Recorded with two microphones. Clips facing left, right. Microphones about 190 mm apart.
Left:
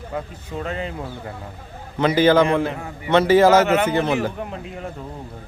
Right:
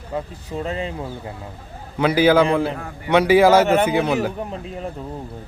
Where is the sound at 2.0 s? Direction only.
10° right (ahead or behind).